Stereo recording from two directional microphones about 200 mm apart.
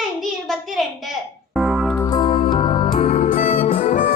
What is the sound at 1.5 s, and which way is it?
Music, centre (ahead or behind).